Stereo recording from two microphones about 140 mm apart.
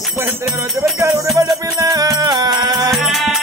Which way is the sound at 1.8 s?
25° right (ahead or behind).